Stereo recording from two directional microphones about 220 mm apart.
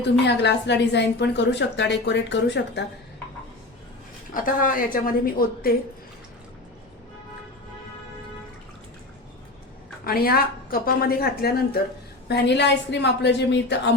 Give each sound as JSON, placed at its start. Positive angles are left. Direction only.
{"t": 0.3, "sound": "a woman's voice", "side_deg": 50}
{"t": 4.4, "sound": "a woman's voice", "side_deg": 40}
{"t": 10.0, "sound": "a woman's voice", "side_deg": 45}